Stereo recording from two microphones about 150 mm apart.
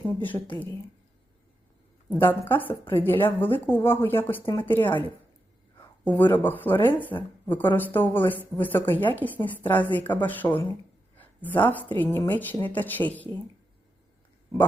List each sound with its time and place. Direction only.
0.2 s speech: 10° left (ahead or behind)
2.5 s speech: 10° left (ahead or behind)
6.1 s speech: 10° left (ahead or behind)